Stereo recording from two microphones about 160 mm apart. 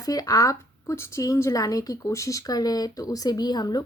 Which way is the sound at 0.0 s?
20° left (ahead or behind).